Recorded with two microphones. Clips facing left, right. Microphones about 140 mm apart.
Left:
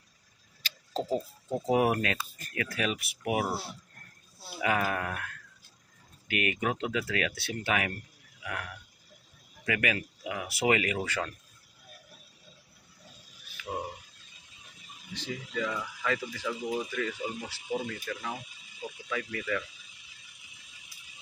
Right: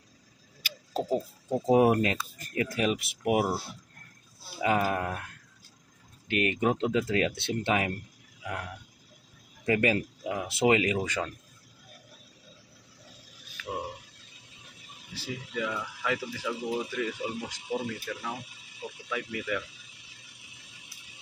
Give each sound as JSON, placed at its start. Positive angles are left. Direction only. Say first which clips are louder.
{"t": 0.6, "sound": "tick-tock", "louder": "right 2 dB", "side_deg": -10}
{"t": 1.7, "sound": "speech", "louder": "right 4 dB", "side_deg": -25}
{"t": 4.6, "sound": "speech", "louder": "right 3 dB", "side_deg": -25}
{"t": 15.1, "sound": "speech", "louder": "even", "side_deg": -10}